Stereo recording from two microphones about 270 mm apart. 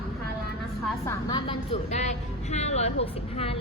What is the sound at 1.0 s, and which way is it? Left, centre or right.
Music, centre.